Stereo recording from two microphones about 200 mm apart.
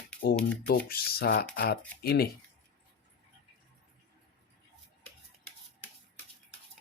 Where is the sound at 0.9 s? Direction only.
50° left (ahead or behind).